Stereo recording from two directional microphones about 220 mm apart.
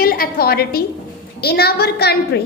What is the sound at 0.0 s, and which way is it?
A woman's voice, 40° left (ahead or behind).